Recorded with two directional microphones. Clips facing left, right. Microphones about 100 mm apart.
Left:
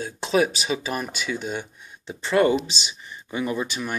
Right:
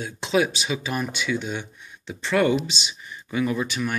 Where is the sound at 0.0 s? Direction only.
35° left (ahead or behind).